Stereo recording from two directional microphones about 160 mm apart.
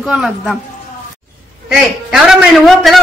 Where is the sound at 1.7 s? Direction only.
5° right (ahead or behind).